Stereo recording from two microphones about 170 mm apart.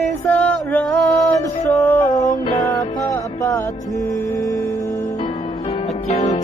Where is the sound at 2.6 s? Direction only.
20° left (ahead or behind).